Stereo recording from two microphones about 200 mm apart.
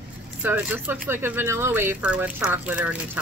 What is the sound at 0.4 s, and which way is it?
Speech, 10° right (ahead or behind).